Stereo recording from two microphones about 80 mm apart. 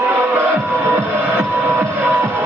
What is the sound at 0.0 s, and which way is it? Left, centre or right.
Music, centre.